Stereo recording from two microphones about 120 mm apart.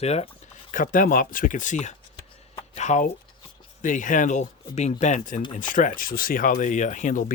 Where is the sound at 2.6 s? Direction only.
75° left (ahead or behind).